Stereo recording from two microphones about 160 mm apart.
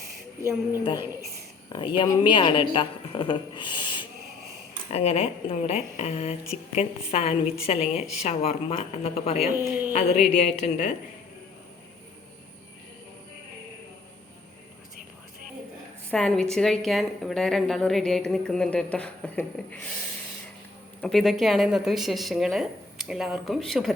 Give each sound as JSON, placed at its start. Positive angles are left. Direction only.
{"t": 1.7, "sound": "a woman's voice", "side_deg": 30}
{"t": 4.9, "sound": "a woman's voice", "side_deg": 40}
{"t": 16.1, "sound": "a woman's voice", "side_deg": 5}
{"t": 21.0, "sound": "a woman's voice", "side_deg": 0}